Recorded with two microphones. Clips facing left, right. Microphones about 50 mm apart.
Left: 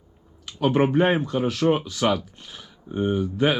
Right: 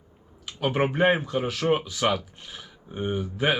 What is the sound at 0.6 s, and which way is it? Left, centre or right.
Speech, centre.